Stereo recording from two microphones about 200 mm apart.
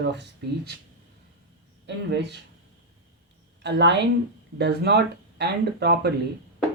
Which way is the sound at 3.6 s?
60° right (ahead or behind).